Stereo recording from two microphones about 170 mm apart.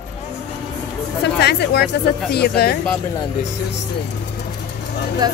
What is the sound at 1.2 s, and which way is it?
Speech, 80° left.